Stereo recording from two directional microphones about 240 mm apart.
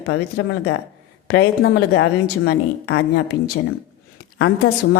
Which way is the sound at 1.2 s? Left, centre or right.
Left.